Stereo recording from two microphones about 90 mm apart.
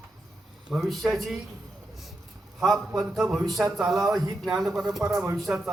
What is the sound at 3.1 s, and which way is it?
Speech, 5° right (ahead or behind).